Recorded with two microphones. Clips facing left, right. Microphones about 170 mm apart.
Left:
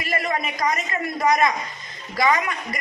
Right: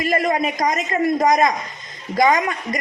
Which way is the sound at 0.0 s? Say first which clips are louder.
Right 6 dB; 40° right (ahead or behind).